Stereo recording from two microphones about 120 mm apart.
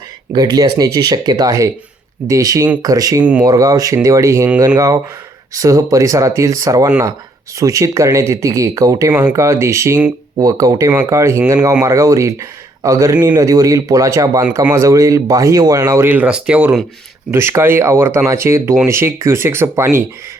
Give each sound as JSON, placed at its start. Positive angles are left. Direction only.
{"t": 0.3, "sound": "speech", "side_deg": -35}
{"t": 5.5, "sound": "speech", "side_deg": -30}
{"t": 16.0, "sound": "speech", "side_deg": -10}
{"t": 17.3, "sound": "speech", "side_deg": -20}